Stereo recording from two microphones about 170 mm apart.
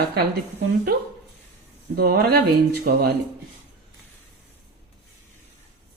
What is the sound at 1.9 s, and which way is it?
Speech, 65° right (ahead or behind).